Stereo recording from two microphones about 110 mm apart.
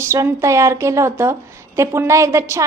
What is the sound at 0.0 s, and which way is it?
A woman's voice, 25° right (ahead or behind).